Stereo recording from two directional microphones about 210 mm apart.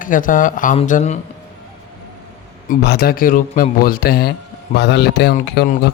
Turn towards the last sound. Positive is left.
turn(degrees=45)  # may be behind; listen again after turning